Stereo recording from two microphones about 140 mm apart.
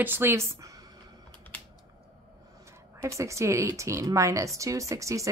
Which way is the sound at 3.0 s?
20° right (ahead or behind).